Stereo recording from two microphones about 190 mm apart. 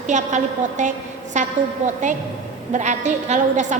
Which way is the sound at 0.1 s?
40° right (ahead or behind).